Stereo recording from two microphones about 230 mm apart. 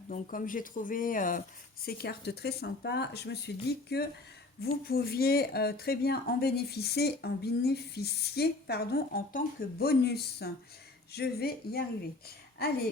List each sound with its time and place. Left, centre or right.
0.1 s speech: left